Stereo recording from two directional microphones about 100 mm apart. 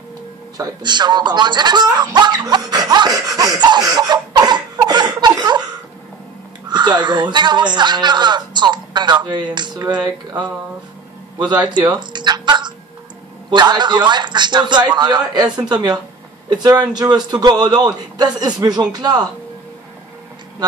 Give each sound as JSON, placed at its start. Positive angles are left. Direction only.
{"t": 0.6, "sound": "a woman's voice", "side_deg": -45}
{"t": 1.9, "sound": "laughter", "side_deg": -45}
{"t": 6.7, "sound": "a woman's voice", "side_deg": -50}